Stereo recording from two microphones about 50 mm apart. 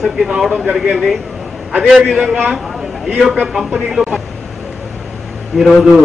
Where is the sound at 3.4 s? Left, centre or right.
Centre.